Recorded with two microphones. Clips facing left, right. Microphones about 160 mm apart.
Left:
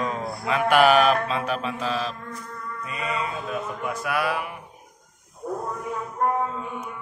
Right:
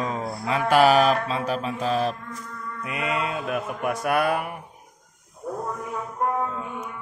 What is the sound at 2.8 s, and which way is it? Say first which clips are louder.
Mantra: right 2 dB; 65° right (ahead or behind).